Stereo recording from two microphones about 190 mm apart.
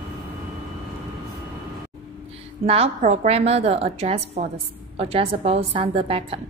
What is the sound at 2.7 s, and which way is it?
A woman's voice, 35° right (ahead or behind).